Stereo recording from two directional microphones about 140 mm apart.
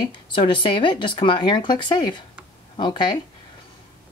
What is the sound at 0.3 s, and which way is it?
Speech, 35° left (ahead or behind).